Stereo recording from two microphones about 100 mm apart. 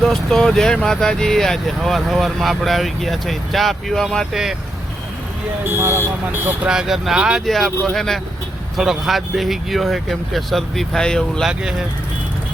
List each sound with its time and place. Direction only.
0.0 s speech: 5° left (ahead or behind)
5.6 s speech: 25° right (ahead or behind)
6.7 s speech: 5° right (ahead or behind)
11.4 s speech: 5° right (ahead or behind)